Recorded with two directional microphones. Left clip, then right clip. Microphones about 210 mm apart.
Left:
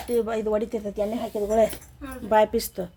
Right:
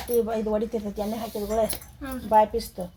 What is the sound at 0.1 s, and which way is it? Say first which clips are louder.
Speech: even; 35° left (ahead or behind).